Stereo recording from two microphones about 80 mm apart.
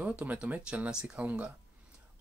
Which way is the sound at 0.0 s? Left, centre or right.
Centre.